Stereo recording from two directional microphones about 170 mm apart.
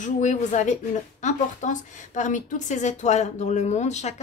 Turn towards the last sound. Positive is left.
turn(degrees=40)  # may be behind; listen again after turning